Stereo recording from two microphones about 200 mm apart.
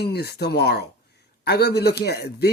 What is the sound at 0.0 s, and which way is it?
A man's voice, 55° left (ahead or behind).